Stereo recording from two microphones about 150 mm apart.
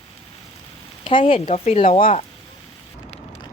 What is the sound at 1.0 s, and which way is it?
Speech, 35° left (ahead or behind).